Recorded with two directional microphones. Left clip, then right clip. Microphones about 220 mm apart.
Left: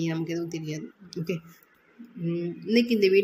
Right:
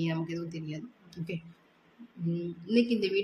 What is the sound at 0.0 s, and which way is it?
Speech, 15° left (ahead or behind).